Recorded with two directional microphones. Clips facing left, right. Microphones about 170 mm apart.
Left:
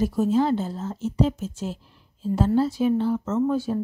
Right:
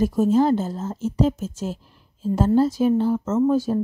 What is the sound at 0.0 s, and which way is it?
Speech, 45° right (ahead or behind).